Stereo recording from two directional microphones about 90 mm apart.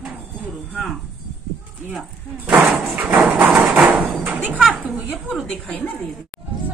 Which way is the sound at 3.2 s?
20° right (ahead or behind).